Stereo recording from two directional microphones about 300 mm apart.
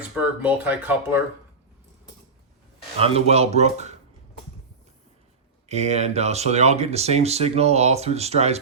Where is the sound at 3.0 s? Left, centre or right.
Right.